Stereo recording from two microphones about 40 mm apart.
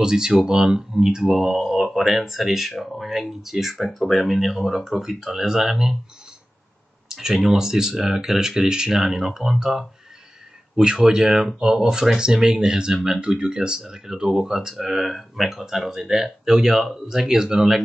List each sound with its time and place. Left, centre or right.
0.0 s speech: centre
7.1 s a sound: centre
7.5 s speech: centre